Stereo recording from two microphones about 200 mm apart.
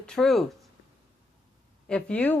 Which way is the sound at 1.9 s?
5° left (ahead or behind).